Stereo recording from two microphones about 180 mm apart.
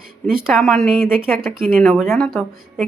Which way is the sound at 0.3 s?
Centre (ahead or behind).